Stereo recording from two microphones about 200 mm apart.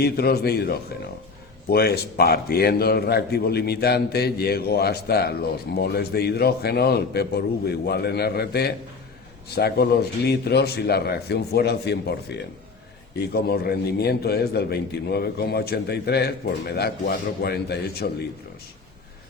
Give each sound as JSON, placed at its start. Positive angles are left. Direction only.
{"t": 0.0, "sound": "a man's voice", "side_deg": 50}